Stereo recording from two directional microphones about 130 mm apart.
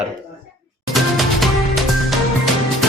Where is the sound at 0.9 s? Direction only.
Centre (ahead or behind).